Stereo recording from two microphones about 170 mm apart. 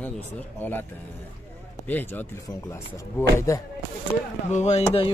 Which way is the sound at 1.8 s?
10° left (ahead or behind).